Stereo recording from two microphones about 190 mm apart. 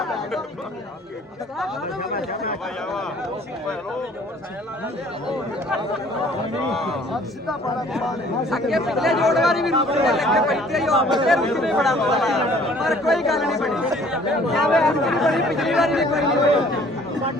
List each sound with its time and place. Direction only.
2.1 s speech: 50° left (ahead or behind)
6.7 s speech: centre (ahead or behind)